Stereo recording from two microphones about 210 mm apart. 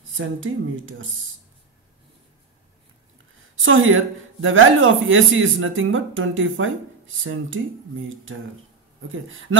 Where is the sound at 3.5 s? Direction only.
70° right (ahead or behind).